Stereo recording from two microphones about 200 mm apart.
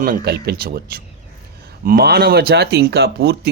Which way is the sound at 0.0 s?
50° right (ahead or behind).